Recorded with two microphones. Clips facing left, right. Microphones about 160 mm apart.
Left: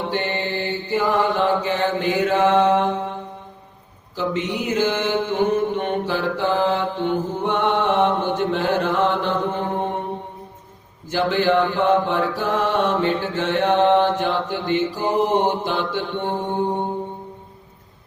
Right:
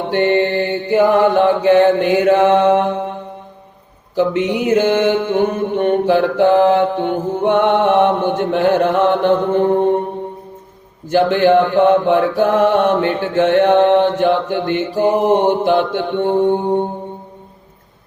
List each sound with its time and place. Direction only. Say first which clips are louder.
0.1 s mantra: right 10 dB; 60° right (ahead or behind)
11.1 s mantra: right 7 dB; 55° right (ahead or behind)